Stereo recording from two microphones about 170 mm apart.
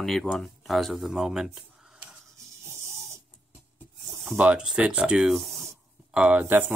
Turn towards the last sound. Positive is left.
turn(degrees=-10)  # may be behind; listen again after turning